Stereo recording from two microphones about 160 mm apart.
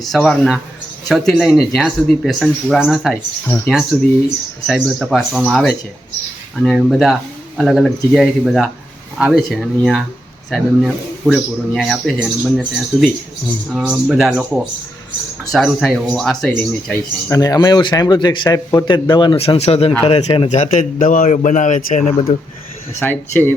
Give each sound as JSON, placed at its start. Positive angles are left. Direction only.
{"t": 0.0, "sound": "speech", "side_deg": 0}
{"t": 3.4, "sound": "speech", "side_deg": 15}
{"t": 3.9, "sound": "speech", "side_deg": -5}
{"t": 16.5, "sound": "speech", "side_deg": 15}
{"t": 20.1, "sound": "a man's voice", "side_deg": 30}
{"t": 23.0, "sound": "speech", "side_deg": 10}